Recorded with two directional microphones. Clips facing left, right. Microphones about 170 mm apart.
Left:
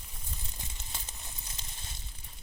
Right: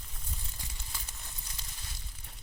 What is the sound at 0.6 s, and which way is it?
Crumpling, 20° left (ahead or behind).